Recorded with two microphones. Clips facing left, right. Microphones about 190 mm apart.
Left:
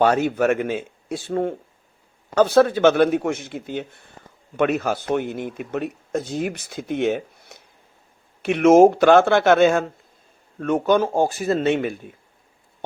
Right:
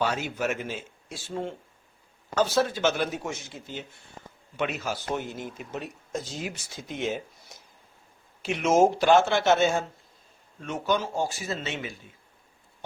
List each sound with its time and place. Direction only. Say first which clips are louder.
0.0 s a man's voice: left 10 dB; 60° left (ahead or behind)